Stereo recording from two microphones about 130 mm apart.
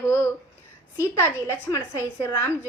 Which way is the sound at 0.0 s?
20° left (ahead or behind).